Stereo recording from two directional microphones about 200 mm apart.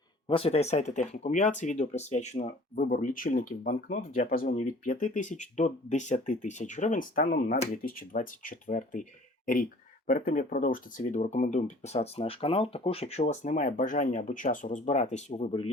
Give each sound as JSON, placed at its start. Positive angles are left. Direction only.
{"t": 0.3, "sound": "speech", "side_deg": 30}
{"t": 10.1, "sound": "speech", "side_deg": 45}